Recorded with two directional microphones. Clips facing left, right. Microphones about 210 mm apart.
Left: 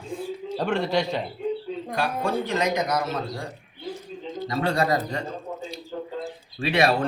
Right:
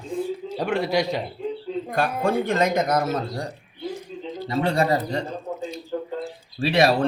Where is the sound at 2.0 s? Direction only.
50° right (ahead or behind).